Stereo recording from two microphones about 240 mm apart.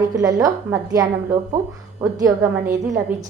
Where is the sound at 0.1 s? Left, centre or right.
Centre.